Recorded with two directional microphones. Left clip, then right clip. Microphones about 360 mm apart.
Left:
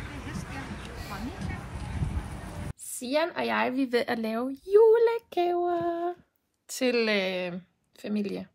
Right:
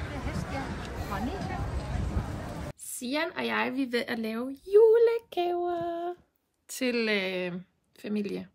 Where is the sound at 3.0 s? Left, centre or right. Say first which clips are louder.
Left 3 dB; centre.